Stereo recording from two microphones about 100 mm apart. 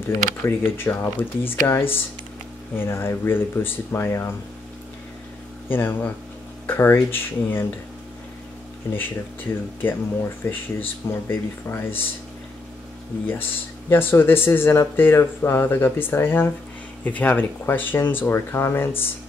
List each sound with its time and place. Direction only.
0.5 s speech: 25° left (ahead or behind)
5.7 s speech: 20° left (ahead or behind)
8.9 s speech: 20° left (ahead or behind)
13.3 s speech: 20° left (ahead or behind)